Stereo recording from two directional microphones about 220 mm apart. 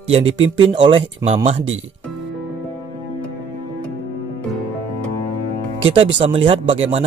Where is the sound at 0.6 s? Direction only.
20° right (ahead or behind).